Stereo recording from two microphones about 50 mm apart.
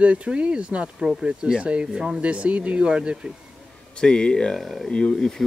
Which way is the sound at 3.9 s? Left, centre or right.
Centre.